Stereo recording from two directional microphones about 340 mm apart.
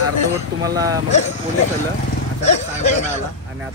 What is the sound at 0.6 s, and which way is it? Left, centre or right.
Speech, centre.